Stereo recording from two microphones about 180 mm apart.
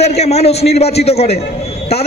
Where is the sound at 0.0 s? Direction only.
35° left (ahead or behind).